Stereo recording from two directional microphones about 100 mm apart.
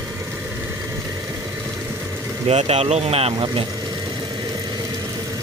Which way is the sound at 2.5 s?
90° right.